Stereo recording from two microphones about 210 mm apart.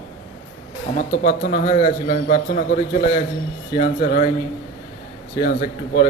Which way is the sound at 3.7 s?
40° left (ahead or behind).